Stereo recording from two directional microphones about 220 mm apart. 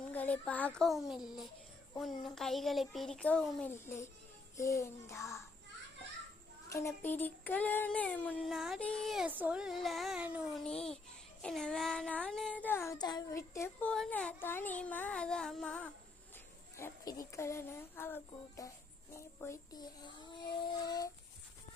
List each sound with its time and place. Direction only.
0.1 s child singing: 5° left (ahead or behind)
2.2 s child singing: centre (ahead or behind)
4.5 s speech: 15° left (ahead or behind)
6.7 s child singing: 15° left (ahead or behind)
16.7 s speech: 15° left (ahead or behind)